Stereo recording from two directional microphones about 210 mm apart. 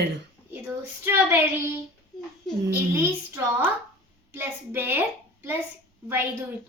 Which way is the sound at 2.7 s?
10° right (ahead or behind).